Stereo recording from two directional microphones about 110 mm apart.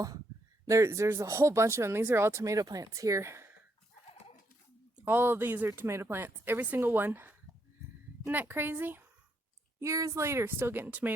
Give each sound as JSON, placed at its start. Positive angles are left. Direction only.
{"t": 0.6, "sound": "speech", "side_deg": -25}
{"t": 4.9, "sound": "speech", "side_deg": -20}
{"t": 9.8, "sound": "speech", "side_deg": -30}